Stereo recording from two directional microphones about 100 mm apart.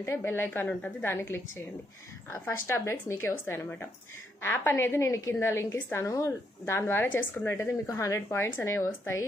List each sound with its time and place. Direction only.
0.0 s a woman's voice: 25° left (ahead or behind)
2.4 s a woman's voice: 25° left (ahead or behind)